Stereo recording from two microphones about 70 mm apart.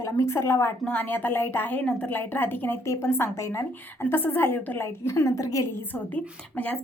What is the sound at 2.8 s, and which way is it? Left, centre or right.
A woman's voice, left.